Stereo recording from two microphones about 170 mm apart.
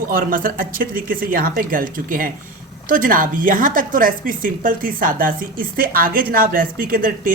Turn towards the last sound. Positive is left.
turn(degrees=-55)  # may be behind; listen again after turning